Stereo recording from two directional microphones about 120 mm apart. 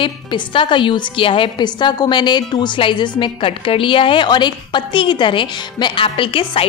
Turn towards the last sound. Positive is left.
turn(degrees=45)  # may be behind; listen again after turning